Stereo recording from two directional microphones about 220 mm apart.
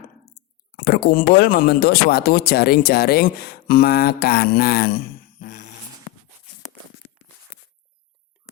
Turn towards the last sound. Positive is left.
turn(degrees=0)  # may be behind; listen again after turning